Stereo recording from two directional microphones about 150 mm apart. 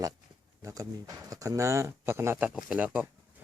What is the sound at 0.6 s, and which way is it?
Speech, 20° right (ahead or behind).